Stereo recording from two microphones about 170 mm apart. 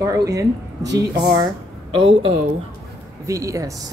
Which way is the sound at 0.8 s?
90° right.